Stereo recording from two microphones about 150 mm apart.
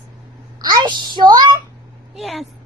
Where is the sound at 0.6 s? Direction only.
30° right (ahead or behind).